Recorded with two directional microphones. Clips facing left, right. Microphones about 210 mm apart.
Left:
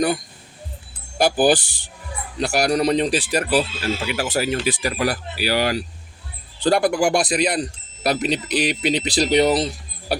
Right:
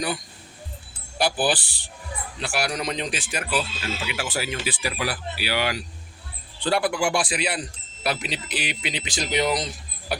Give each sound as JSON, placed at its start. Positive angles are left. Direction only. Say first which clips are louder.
{"t": 1.2, "sound": "speech", "louder": "left 7 dB", "side_deg": 45}